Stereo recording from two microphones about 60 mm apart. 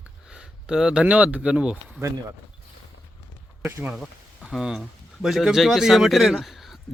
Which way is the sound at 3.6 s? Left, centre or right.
Right.